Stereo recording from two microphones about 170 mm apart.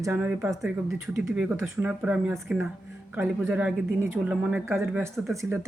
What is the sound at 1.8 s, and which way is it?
Speech, 5° right (ahead or behind).